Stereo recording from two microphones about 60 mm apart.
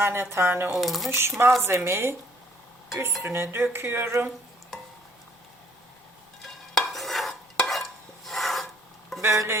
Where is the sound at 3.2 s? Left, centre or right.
Right.